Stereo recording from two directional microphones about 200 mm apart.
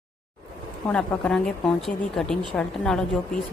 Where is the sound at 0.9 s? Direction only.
5° left (ahead or behind).